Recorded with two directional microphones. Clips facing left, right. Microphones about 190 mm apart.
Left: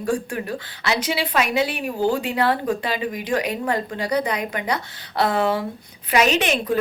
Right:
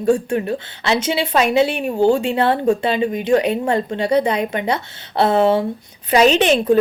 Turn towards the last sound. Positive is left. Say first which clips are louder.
# right 7 dB
turn(degrees=-30)  # may be behind; listen again after turning